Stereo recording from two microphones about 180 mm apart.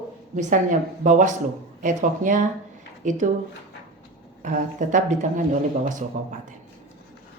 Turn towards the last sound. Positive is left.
turn(degrees=-45)  # may be behind; listen again after turning